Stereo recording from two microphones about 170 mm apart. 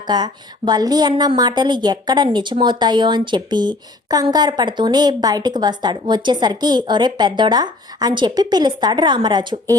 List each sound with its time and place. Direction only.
0.1 s a woman's voice: 25° right (ahead or behind)